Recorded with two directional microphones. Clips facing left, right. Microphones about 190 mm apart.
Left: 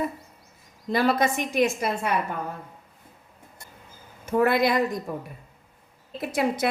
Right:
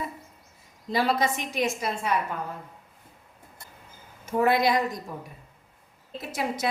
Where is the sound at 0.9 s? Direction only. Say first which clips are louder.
Left 3 dB; 55° left (ahead or behind).